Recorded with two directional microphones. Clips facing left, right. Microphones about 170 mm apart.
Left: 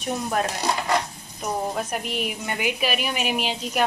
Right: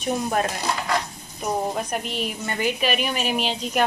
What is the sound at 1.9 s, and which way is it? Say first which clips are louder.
Speech: even; 10° left (ahead or behind).